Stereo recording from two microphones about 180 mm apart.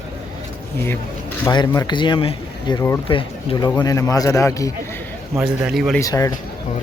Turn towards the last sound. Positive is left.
turn(degrees=20)  # may be behind; listen again after turning